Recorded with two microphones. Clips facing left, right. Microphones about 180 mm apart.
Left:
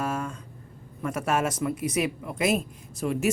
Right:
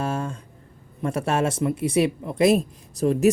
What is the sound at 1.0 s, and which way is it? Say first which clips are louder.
Speech: right 3 dB; 30° right (ahead or behind).